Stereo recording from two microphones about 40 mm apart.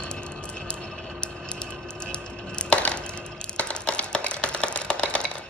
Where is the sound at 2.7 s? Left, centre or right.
Left.